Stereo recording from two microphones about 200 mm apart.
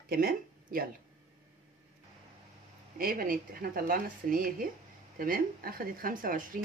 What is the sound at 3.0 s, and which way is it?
Speech, 45° right (ahead or behind).